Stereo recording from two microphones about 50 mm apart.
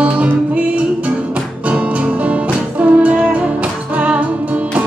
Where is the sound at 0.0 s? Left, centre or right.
Right.